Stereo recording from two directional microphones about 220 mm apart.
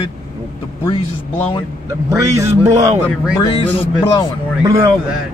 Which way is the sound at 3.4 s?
25° left (ahead or behind).